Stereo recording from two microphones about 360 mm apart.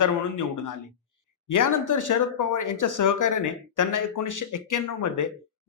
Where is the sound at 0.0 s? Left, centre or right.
Left.